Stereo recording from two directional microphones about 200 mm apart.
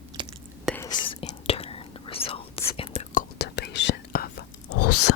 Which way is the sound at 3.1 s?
55° left (ahead or behind).